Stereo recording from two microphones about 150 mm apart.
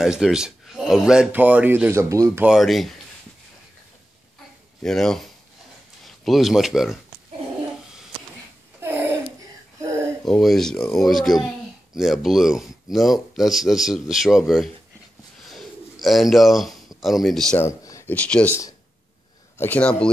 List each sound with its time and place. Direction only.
0.0 s speech: 5° right (ahead or behind)
2.5 s speech: centre (ahead or behind)
4.8 s speech: 5° left (ahead or behind)
10.2 s speech: centre (ahead or behind)
15.4 s bird: centre (ahead or behind)
17.6 s a sound: 20° left (ahead or behind)
18.1 s speech: 10° left (ahead or behind)
19.6 s speech: 10° left (ahead or behind)